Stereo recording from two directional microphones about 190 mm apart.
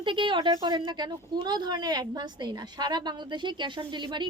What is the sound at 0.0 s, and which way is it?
A woman's voice, 25° right (ahead or behind).